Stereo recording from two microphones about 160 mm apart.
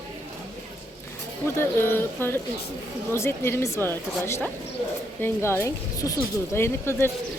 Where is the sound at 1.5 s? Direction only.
15° left (ahead or behind).